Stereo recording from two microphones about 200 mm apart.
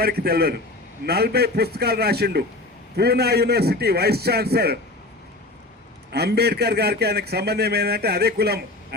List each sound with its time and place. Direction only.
0.0 s a man's voice: 50° right (ahead or behind)
6.1 s a man's voice: 55° right (ahead or behind)